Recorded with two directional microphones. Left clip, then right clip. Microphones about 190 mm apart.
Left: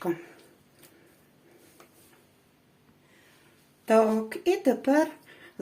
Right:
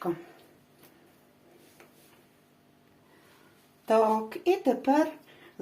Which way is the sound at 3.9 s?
35° left (ahead or behind).